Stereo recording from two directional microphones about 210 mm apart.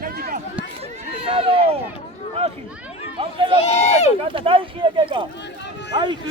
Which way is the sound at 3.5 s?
30° left (ahead or behind).